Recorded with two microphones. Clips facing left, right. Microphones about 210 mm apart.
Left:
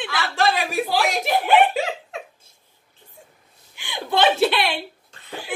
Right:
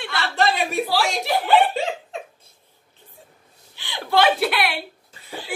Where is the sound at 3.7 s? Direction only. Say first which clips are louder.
Right 2 dB; 15° left (ahead or behind).